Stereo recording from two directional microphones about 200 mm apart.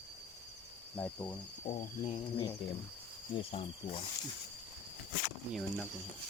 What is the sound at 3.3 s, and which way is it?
Cricket, 25° left (ahead or behind).